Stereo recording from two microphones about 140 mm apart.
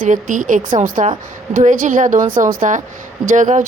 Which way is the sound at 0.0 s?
70° right (ahead or behind).